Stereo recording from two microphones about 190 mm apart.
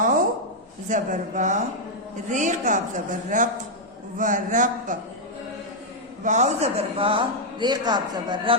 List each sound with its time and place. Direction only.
0.9 s a woman's voice: 40° right (ahead or behind)
6.2 s speech: 40° right (ahead or behind); by 8.5 s 25° right (ahead or behind)